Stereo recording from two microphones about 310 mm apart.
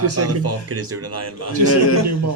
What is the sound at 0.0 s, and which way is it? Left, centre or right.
Speech, right.